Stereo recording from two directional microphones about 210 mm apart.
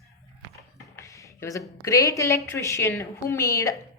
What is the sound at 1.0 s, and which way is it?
Speech, 15° left (ahead or behind).